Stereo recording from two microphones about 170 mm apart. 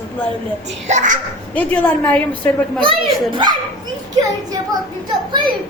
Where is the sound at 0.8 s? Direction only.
45° right (ahead or behind).